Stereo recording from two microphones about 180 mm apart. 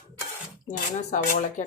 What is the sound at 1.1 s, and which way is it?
Speech, 45° left (ahead or behind).